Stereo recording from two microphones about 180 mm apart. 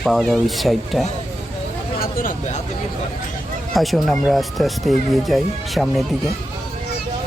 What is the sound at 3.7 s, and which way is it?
Speech, centre (ahead or behind).